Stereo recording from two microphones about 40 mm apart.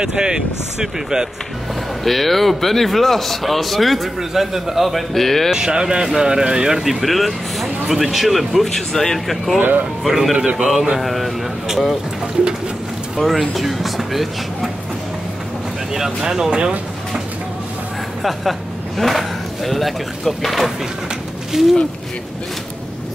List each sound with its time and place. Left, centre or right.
0.0 s speech: centre
2.0 s speech: centre
5.5 s speech: centre
10.3 s speech: right
11.0 s speech: centre
13.2 s speech: centre
15.9 s speech: centre
18.2 s speech: centre
21.5 s speech: centre